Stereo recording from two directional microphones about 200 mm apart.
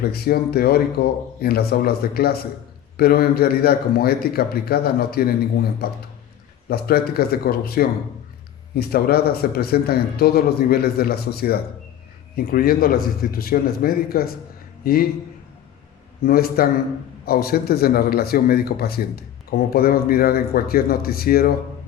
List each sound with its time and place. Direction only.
0.0 s speech: 50° left (ahead or behind)
16.2 s speech: 50° left (ahead or behind)